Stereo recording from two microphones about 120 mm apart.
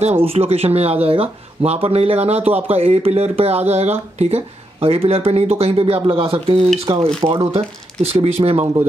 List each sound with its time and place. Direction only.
0.2 s speech: 55° right (ahead or behind)